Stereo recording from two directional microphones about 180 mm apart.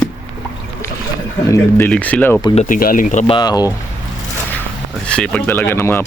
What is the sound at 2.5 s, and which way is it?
Speech, 45° left (ahead or behind).